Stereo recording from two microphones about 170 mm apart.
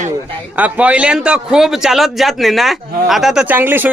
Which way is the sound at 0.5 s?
10° right (ahead or behind).